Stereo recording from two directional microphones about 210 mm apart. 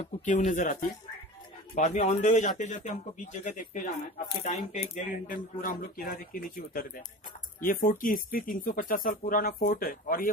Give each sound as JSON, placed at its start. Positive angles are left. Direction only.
{"t": 0.2, "sound": "speech", "side_deg": 40}